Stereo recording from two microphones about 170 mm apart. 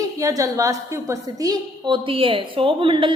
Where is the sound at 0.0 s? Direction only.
20° right (ahead or behind).